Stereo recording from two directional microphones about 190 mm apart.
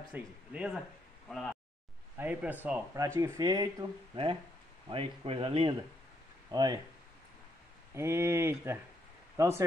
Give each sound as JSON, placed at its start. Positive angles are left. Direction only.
{"t": 0.1, "sound": "speech", "side_deg": -5}
{"t": 2.1, "sound": "speech", "side_deg": -10}
{"t": 7.9, "sound": "speech", "side_deg": -15}